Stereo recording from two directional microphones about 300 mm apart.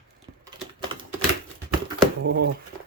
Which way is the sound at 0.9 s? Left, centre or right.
Centre.